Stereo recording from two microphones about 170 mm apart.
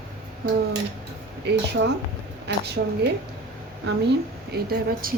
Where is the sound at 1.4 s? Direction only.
90° right.